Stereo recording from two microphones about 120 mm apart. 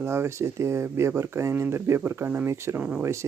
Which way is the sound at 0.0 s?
20° right (ahead or behind).